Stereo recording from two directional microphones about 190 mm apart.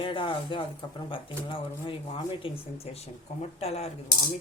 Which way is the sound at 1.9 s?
30° left (ahead or behind).